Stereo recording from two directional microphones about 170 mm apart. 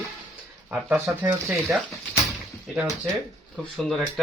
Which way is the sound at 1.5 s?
5° right (ahead or behind).